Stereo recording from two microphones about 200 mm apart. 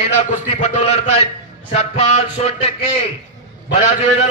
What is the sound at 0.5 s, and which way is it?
A man's voice, 35° left (ahead or behind).